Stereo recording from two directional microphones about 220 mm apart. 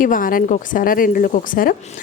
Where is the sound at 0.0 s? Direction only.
40° left (ahead or behind).